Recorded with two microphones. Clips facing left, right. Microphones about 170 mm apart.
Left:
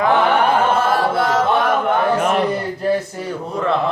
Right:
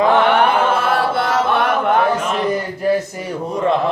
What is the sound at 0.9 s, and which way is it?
Chant, 65° right (ahead or behind).